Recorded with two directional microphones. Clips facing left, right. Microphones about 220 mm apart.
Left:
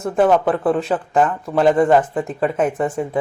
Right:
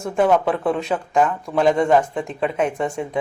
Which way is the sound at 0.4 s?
5° left (ahead or behind).